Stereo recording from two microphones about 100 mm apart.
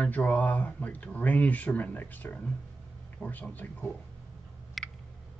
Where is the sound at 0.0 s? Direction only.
15° left (ahead or behind).